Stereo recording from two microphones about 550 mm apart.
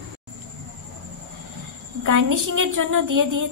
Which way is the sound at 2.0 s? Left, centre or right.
Right.